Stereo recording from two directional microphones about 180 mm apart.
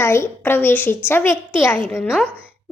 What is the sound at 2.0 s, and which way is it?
Speech, centre (ahead or behind).